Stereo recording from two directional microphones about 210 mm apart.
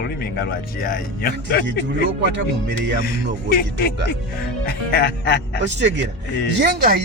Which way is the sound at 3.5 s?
45° left (ahead or behind).